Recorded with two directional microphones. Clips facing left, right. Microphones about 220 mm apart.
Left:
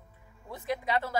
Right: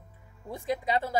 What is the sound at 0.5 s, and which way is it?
Speech, 15° right (ahead or behind).